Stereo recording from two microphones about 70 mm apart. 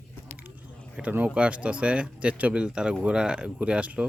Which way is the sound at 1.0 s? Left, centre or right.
Centre.